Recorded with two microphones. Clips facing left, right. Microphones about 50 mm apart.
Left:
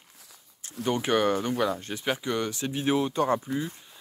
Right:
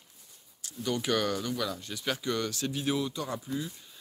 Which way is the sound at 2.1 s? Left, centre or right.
Left.